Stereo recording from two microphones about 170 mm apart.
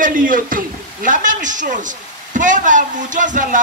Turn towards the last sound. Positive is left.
turn(degrees=-50)  # may be behind; listen again after turning